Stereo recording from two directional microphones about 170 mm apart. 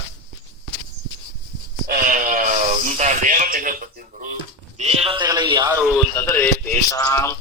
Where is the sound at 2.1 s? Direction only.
50° right (ahead or behind).